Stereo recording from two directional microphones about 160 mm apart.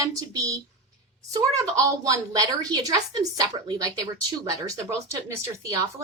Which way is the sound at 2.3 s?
25° right (ahead or behind).